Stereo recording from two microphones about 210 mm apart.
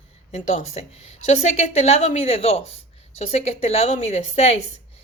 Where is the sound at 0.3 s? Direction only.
35° left (ahead or behind).